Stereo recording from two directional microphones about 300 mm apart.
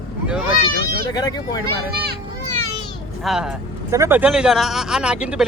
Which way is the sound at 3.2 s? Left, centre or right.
Centre.